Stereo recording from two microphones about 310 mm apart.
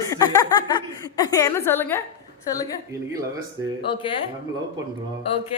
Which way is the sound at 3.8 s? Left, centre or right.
Centre.